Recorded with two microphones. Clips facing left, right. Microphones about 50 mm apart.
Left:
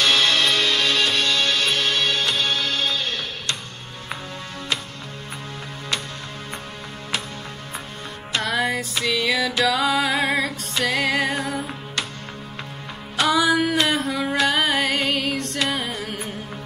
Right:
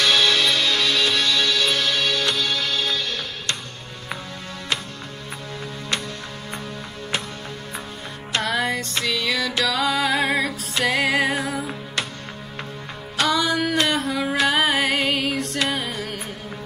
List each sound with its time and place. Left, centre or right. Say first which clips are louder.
0.0 s music: even; left
8.3 s music: even; centre
13.2 s music: left 2 dB; centre